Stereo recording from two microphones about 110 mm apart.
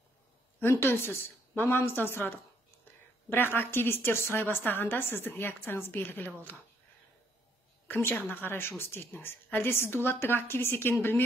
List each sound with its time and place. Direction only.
0.6 s a woman's voice: 20° left (ahead or behind)
7.9 s a woman's voice: 15° left (ahead or behind)